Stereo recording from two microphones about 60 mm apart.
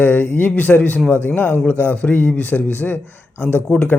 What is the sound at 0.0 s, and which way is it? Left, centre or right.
A man's voice, left.